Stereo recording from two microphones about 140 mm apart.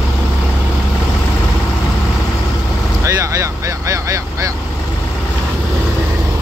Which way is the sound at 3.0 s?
20° right (ahead or behind).